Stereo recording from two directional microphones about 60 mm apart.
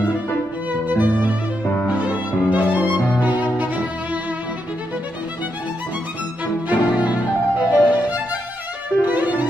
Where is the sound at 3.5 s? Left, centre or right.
Right.